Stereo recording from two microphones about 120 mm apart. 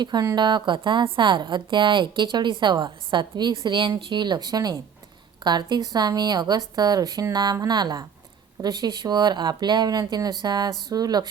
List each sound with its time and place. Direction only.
0.0 s a woman's voice: 35° right (ahead or behind)